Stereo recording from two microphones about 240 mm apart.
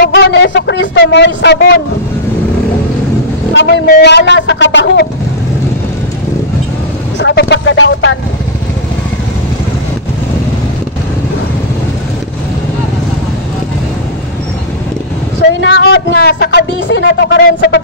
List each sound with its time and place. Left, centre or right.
0.0 s speech: left
3.5 s speech: left
7.2 s speech: left
15.6 s speech: left